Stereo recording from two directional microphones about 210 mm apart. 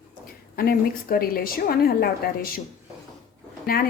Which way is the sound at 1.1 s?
45° left (ahead or behind).